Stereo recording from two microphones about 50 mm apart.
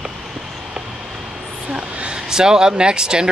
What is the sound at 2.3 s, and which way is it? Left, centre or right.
Speech, centre.